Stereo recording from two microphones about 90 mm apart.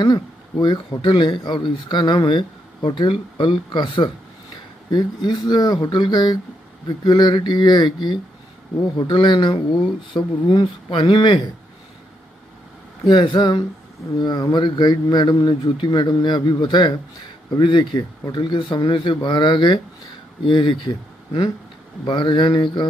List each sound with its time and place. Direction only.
0.0 s speech: 55° left (ahead or behind)
1.1 s speech: 65° left (ahead or behind)
13.0 s speech: 55° left (ahead or behind)
14.1 s speech: 45° left (ahead or behind)
17.6 s speech: 70° left (ahead or behind)
19.2 s speech: 60° left (ahead or behind)